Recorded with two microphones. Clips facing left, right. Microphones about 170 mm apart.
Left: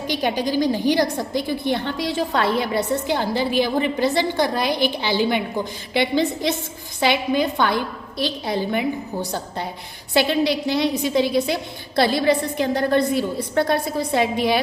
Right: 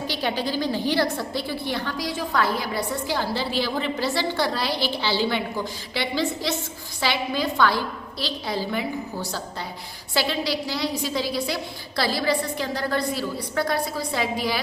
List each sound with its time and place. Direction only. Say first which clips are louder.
0.1 s a woman's voice: left 6 dB; 15° left (ahead or behind)